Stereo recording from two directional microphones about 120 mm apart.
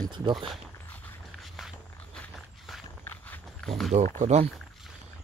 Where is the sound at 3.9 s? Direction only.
85° right.